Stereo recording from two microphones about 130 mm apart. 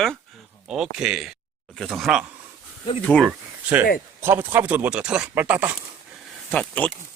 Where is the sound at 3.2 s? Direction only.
15° right (ahead or behind).